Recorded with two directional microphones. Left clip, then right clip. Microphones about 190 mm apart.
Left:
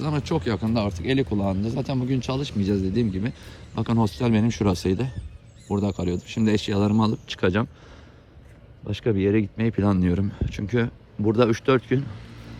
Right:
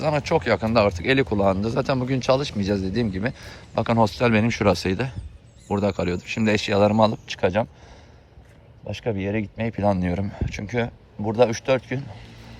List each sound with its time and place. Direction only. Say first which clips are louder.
0.0 s speech: right 5 dB; 15° left (ahead or behind)
8.9 s speech: left 4 dB; 35° left (ahead or behind)